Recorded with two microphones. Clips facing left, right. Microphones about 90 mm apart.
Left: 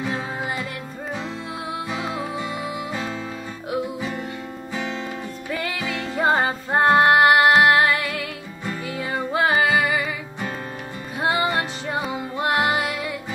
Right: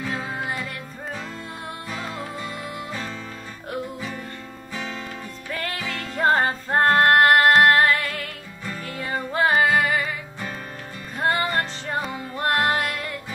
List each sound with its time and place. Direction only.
1.9 s music: 10° left (ahead or behind)
4.7 s music: 20° left (ahead or behind)
5.5 s music: 5° left (ahead or behind)